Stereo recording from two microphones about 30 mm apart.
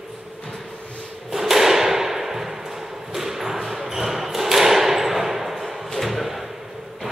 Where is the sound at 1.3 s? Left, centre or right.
Centre.